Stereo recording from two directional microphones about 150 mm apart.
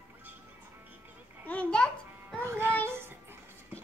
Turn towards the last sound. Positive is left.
turn(degrees=-15)  # may be behind; listen again after turning